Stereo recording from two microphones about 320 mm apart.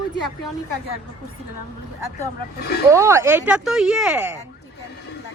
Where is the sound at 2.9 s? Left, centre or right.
Centre.